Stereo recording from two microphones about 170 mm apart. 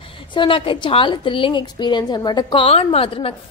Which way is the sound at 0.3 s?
30° left (ahead or behind).